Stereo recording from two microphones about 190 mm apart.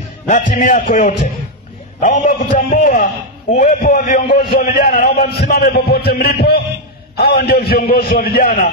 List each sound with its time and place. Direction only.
0.3 s a man's voice: 40° left (ahead or behind)